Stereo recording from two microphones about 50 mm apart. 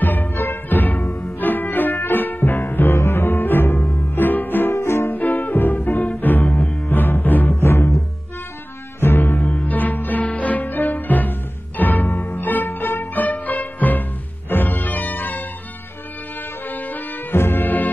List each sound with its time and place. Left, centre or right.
0.0 s music: left
3.0 s music: left
4.6 s music: left
5.1 s music: left
7.6 s music: left
9.0 s music: left
16.6 s music: left